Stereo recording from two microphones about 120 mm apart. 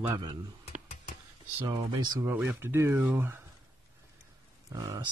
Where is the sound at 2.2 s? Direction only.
15° right (ahead or behind).